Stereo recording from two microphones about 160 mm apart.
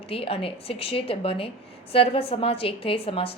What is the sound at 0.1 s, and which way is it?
A woman's voice, 35° left (ahead or behind).